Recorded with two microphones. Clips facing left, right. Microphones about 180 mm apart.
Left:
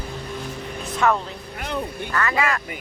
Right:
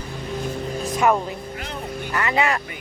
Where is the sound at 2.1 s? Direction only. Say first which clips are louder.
Right 2 dB; 20° right (ahead or behind).